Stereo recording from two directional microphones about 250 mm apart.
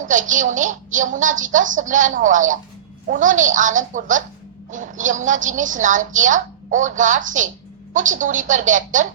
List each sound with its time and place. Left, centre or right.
0.0 s a woman's voice: right